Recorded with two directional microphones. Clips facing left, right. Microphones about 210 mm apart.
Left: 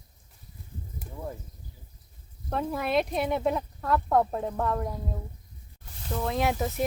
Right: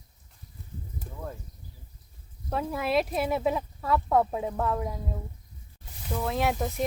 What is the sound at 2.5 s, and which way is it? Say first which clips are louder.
Speech: even; centre (ahead or behind).